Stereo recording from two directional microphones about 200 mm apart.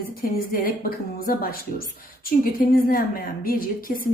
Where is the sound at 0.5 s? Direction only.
45° left (ahead or behind).